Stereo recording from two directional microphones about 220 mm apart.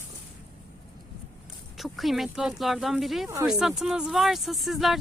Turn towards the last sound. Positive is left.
turn(degrees=0)  # may be behind; listen again after turning